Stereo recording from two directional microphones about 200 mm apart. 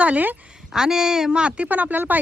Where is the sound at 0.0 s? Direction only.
10° right (ahead or behind).